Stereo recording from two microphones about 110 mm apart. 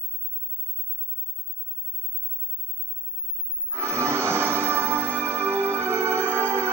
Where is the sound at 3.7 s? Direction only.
25° right (ahead or behind).